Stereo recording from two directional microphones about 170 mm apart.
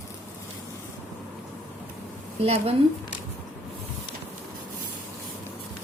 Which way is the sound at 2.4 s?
35° right (ahead or behind).